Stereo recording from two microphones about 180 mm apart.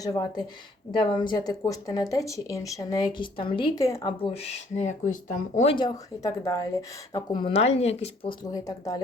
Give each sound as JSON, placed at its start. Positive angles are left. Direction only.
{"t": 0.0, "sound": "speech", "side_deg": 20}
{"t": 4.2, "sound": "speech", "side_deg": 35}
{"t": 5.5, "sound": "speech", "side_deg": 30}
{"t": 8.5, "sound": "speech", "side_deg": 20}